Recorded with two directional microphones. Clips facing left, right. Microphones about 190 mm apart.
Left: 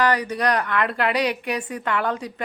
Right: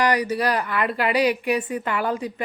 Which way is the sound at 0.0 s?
10° right (ahead or behind).